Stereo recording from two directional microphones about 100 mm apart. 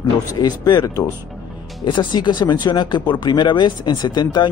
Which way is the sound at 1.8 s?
55° left (ahead or behind).